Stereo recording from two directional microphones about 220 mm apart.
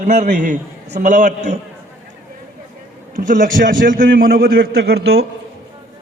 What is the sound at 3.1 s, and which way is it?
A man's voice, 35° right (ahead or behind).